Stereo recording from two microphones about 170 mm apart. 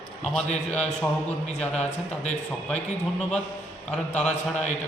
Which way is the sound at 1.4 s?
40° left (ahead or behind).